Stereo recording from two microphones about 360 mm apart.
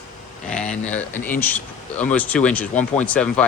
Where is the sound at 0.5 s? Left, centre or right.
Centre.